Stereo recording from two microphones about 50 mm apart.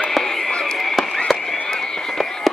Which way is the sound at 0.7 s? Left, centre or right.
Centre.